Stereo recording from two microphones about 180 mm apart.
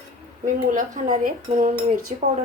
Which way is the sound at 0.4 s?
45° right (ahead or behind).